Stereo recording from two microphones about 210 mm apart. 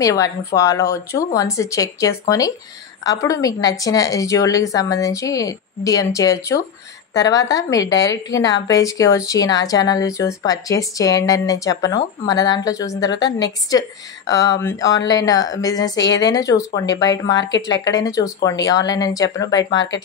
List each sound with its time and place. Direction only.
0.0 s a woman's voice: 15° left (ahead or behind)